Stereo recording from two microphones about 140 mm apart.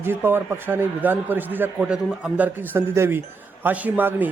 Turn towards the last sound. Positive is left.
turn(degrees=-15)  # may be behind; listen again after turning